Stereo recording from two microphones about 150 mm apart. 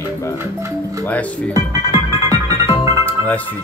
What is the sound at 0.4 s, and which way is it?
Speech, 20° right (ahead or behind).